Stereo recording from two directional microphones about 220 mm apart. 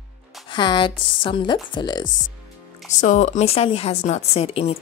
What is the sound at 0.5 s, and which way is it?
A woman's voice, 20° left (ahead or behind).